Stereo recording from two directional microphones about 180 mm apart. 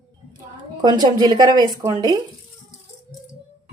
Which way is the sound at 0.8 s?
20° right (ahead or behind).